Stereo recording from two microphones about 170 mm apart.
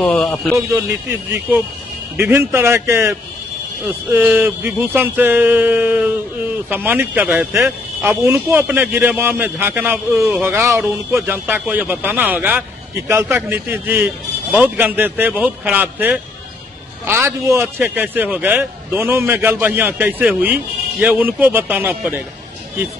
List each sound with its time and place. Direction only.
0.0 s speech: 5° left (ahead or behind)
0.6 s a man's voice: 20° right (ahead or behind)
10.6 s speech: centre (ahead or behind)
10.9 s a man's voice: 15° right (ahead or behind)